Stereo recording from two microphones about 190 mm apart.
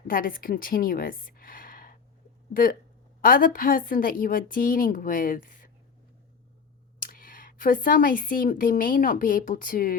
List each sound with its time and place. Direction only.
0.1 s a woman's voice: 50° left (ahead or behind)
7.0 s speech: 45° left (ahead or behind)